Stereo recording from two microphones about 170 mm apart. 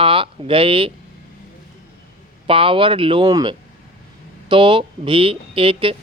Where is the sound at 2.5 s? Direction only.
30° right (ahead or behind).